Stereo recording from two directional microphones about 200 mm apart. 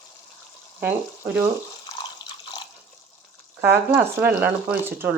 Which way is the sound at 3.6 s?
10° right (ahead or behind).